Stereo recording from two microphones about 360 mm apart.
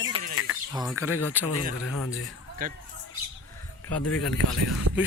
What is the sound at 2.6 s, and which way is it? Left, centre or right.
Speech, right.